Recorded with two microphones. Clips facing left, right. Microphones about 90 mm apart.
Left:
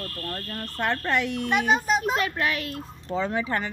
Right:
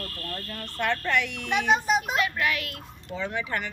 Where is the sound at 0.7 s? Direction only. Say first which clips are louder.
Even; 35° left (ahead or behind).